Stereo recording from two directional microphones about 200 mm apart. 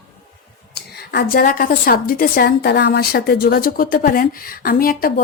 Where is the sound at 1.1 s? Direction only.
50° left (ahead or behind).